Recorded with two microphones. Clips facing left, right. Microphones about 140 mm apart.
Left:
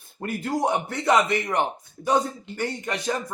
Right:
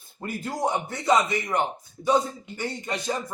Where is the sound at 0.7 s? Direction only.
65° left (ahead or behind).